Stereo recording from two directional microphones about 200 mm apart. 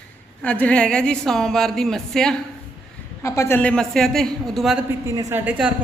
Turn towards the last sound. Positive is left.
turn(degrees=-5)  # may be behind; listen again after turning